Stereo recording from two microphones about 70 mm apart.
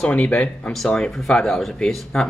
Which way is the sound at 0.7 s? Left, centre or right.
Centre.